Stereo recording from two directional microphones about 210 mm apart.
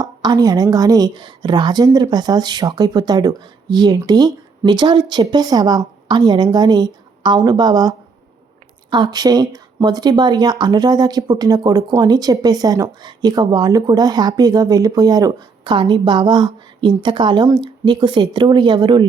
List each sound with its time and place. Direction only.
0.0 s speech: 20° right (ahead or behind)